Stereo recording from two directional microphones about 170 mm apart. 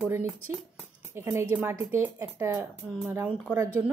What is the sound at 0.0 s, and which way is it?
A woman's voice, 10° right (ahead or behind).